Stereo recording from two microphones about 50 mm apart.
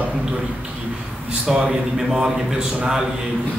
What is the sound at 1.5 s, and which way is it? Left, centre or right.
A man's voice, centre.